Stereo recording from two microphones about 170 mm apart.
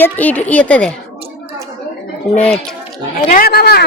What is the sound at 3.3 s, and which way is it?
Speech, 60° left (ahead or behind).